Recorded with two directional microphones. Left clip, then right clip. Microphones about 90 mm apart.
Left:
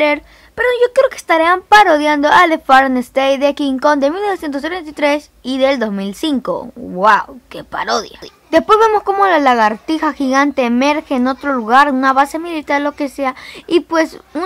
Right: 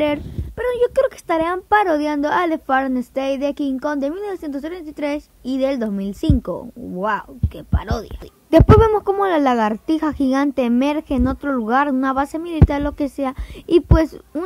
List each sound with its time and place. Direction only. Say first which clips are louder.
0.0 s a woman's voice: left 6 dB; 40° right (ahead or behind); by 5.2 s 15° right (ahead or behind)
5.4 s speech: left 5 dB; 25° right (ahead or behind)
9.2 s a woman's voice: left 9 dB; 50° right (ahead or behind)